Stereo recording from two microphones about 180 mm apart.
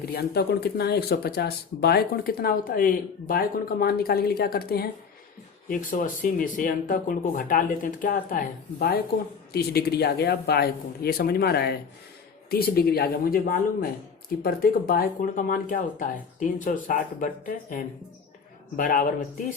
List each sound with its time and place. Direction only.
0.0 s speech: 60° left (ahead or behind)
5.6 s speech: 50° left (ahead or behind)